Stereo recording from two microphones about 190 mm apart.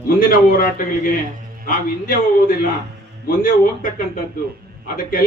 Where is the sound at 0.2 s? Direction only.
50° left (ahead or behind).